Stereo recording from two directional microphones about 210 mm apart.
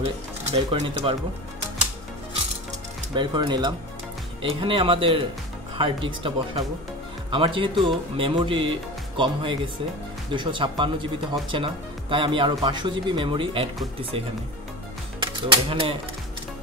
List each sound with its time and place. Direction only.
0.7 s speech: 30° right (ahead or behind)
3.2 s speech: 20° right (ahead or behind)
15.1 s speech: 25° right (ahead or behind)